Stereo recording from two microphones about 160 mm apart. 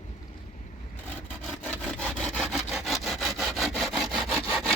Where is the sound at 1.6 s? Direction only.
5° left (ahead or behind).